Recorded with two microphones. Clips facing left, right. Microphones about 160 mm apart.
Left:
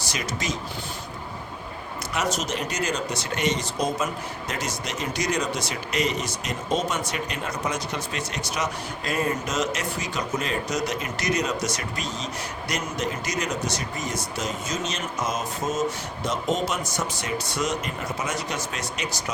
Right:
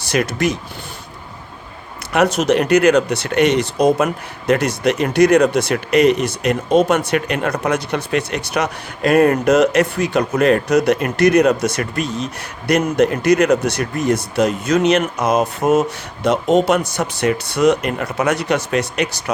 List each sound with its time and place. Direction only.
0.0 s speech: 60° right (ahead or behind)
2.1 s speech: 65° right (ahead or behind)